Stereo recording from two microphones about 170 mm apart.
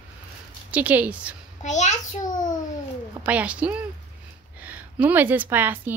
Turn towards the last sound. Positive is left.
turn(degrees=-10)  # may be behind; listen again after turning